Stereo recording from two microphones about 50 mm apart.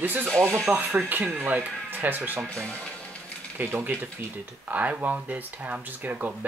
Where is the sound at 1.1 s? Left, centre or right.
Right.